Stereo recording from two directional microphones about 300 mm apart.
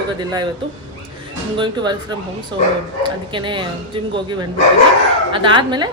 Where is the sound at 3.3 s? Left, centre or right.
Centre.